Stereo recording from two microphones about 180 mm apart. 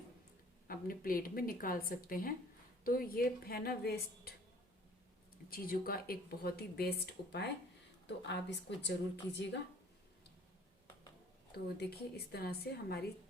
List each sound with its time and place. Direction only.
0.7 s a woman's voice: 50° left (ahead or behind)
5.5 s speech: 55° left (ahead or behind)
8.0 s a woman's voice: 75° left (ahead or behind)
11.9 s speech: 60° left (ahead or behind)